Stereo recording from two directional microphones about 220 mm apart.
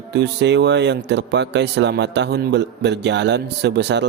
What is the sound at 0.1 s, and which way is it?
Speech, 50° right (ahead or behind).